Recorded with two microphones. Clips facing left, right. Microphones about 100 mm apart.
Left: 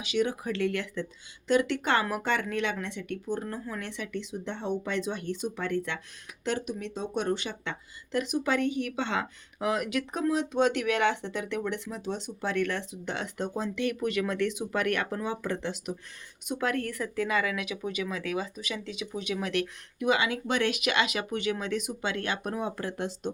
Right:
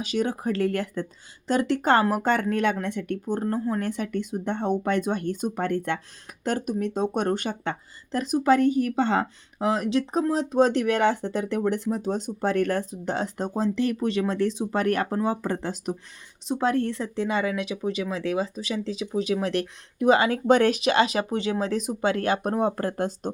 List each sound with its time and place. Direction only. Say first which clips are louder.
0.0 s speech: right 3 dB; 40° right (ahead or behind)